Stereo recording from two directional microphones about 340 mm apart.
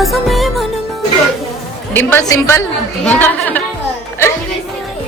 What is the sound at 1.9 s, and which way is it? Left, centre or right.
A woman's voice, centre.